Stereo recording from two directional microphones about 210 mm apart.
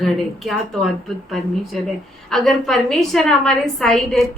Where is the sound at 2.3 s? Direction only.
Centre (ahead or behind).